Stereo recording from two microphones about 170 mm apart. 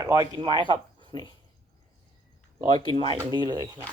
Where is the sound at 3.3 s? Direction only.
25° right (ahead or behind).